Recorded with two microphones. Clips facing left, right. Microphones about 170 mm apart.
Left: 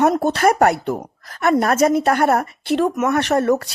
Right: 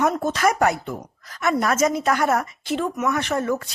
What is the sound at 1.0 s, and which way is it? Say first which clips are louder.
A woman's voice: left 5 dB; 55° left (ahead or behind).